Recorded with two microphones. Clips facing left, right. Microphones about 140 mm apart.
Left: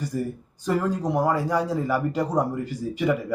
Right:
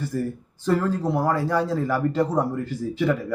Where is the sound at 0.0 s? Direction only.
15° left (ahead or behind).